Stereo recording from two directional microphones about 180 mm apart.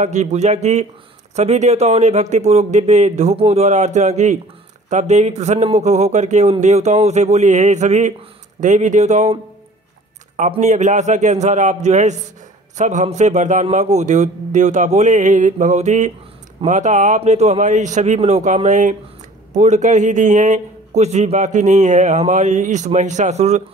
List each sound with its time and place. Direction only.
0.0 s a man's voice: 40° right (ahead or behind)
10.5 s a man's voice: 40° right (ahead or behind)